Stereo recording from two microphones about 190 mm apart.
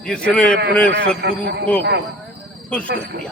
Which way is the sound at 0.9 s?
60° right (ahead or behind).